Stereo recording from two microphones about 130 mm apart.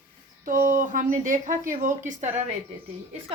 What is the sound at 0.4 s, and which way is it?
A woman's voice, 90° right.